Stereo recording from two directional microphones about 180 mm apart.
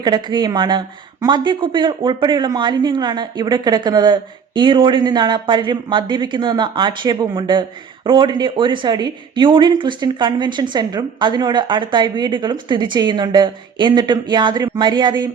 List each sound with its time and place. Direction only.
0.0 s speech: 25° right (ahead or behind)